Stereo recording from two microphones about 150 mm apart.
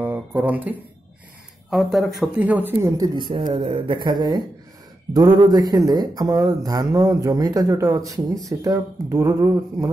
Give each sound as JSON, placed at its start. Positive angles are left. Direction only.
{"t": 0.0, "sound": "a sound", "side_deg": -10}
{"t": 1.7, "sound": "speech", "side_deg": 0}
{"t": 2.3, "sound": "speech", "side_deg": -10}
{"t": 3.0, "sound": "speech", "side_deg": -30}